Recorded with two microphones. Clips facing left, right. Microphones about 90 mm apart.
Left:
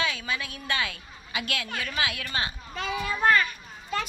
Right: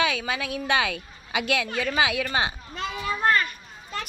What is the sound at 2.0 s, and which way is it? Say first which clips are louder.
Speech: right 6 dB; 90° right.